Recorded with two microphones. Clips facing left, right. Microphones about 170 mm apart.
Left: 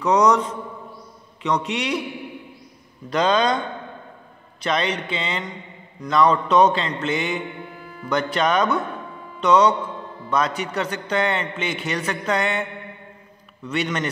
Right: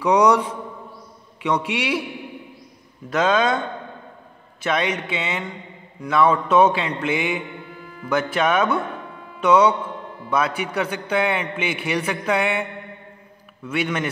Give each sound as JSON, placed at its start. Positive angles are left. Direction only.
{"t": 0.0, "sound": "a man's voice", "side_deg": -10}
{"t": 3.1, "sound": "a man's voice", "side_deg": -5}
{"t": 4.6, "sound": "a man's voice", "side_deg": -10}
{"t": 13.7, "sound": "a man's voice", "side_deg": -5}